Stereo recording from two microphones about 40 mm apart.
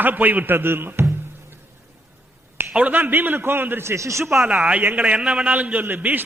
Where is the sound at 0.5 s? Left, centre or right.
Right.